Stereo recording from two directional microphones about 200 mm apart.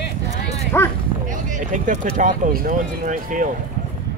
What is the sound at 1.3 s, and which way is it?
Speech, 40° right (ahead or behind).